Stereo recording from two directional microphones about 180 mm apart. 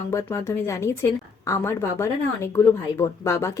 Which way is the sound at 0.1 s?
15° left (ahead or behind).